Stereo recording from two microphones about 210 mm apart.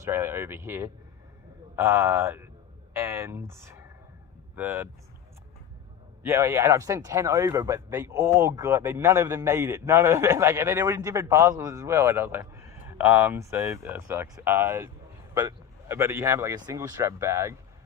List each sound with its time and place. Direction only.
0.0 s speech: 10° right (ahead or behind)
2.9 s a sound: 15° right (ahead or behind)
4.5 s speech: 10° right (ahead or behind)
6.2 s speech: 15° right (ahead or behind)